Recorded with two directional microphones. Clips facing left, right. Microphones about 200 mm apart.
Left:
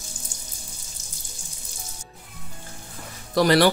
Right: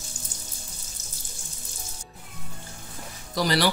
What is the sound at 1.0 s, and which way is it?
Water tap, 10° left (ahead or behind).